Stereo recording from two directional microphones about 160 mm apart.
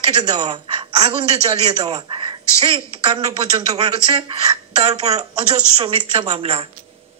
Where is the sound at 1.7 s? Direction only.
25° right (ahead or behind).